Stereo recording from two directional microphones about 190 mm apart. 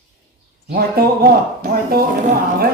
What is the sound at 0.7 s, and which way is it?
Speech, 50° right (ahead or behind).